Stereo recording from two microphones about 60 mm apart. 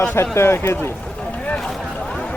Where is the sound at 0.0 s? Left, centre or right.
Left.